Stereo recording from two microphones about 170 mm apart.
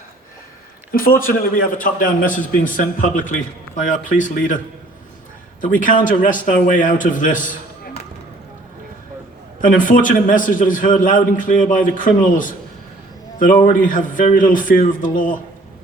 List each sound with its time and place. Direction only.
0.9 s a man's voice: 55° left (ahead or behind)
5.6 s a man's voice: 50° left (ahead or behind)
9.6 s a man's voice: 50° left (ahead or behind)
13.8 s a man's voice: 50° left (ahead or behind)